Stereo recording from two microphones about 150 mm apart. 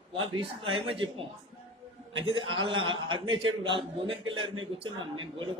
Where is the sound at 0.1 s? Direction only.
35° right (ahead or behind).